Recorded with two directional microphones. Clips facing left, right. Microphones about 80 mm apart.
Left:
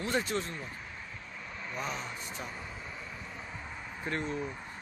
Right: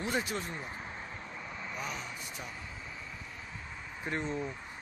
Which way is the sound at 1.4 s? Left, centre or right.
Centre.